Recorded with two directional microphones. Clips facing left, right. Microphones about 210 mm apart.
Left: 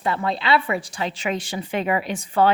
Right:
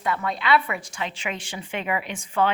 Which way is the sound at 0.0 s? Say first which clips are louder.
Left 3 dB; 30° left (ahead or behind).